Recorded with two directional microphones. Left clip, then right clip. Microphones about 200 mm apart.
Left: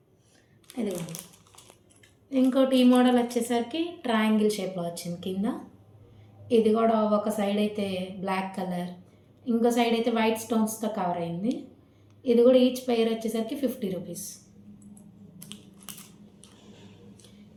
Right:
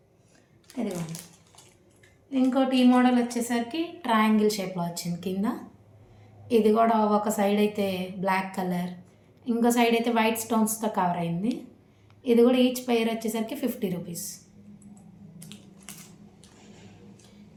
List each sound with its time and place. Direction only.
0.7 s speech: 5° left (ahead or behind)
2.3 s a woman's voice: 15° right (ahead or behind); by 4.4 s 35° right (ahead or behind)
4.5 s a woman's voice: 45° right (ahead or behind)
15.5 s crushing: 5° left (ahead or behind)